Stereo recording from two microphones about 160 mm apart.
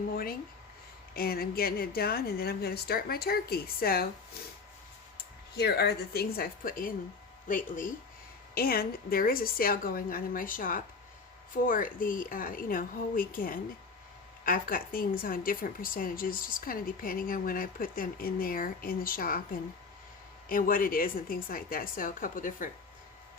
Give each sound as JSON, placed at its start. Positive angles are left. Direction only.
{"t": 0.1, "sound": "a woman's voice", "side_deg": 65}
{"t": 5.1, "sound": "speech", "side_deg": 85}
{"t": 8.5, "sound": "a woman's voice", "side_deg": 70}
{"t": 20.5, "sound": "a woman's voice", "side_deg": 60}